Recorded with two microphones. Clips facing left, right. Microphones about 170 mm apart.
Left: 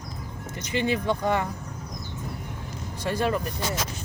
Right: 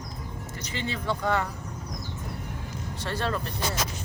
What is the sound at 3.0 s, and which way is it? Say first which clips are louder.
Speech: left 5 dB; 10° left (ahead or behind).